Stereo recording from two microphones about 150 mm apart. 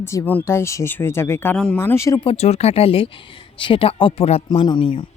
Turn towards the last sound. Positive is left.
turn(degrees=35)  # may be behind; listen again after turning